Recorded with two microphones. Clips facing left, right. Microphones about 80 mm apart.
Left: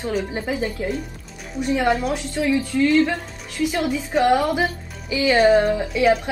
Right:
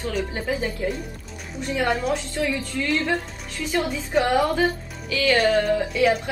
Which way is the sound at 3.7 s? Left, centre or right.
Centre.